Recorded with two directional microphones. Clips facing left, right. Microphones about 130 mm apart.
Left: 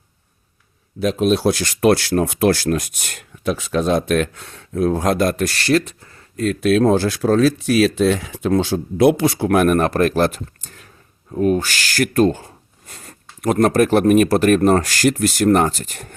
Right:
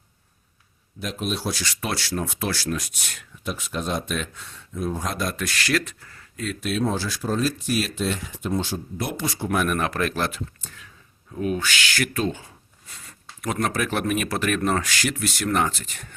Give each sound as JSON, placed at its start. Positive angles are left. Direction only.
{"t": 1.0, "sound": "speech", "side_deg": 70}
{"t": 3.4, "sound": "speech", "side_deg": 90}
{"t": 5.6, "sound": "speech", "side_deg": 25}
{"t": 6.3, "sound": "speech", "side_deg": 55}
{"t": 6.9, "sound": "speech", "side_deg": 60}
{"t": 9.7, "sound": "speech", "side_deg": 45}